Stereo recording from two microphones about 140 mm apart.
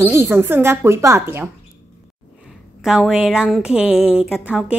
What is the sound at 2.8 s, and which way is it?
A woman's voice, 5° right (ahead or behind).